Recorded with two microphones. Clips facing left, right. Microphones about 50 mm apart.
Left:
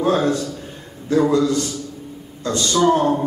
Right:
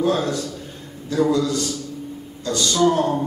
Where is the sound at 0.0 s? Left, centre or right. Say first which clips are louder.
Left 3 dB; left.